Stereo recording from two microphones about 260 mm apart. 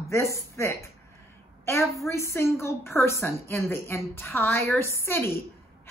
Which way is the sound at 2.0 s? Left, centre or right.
Centre.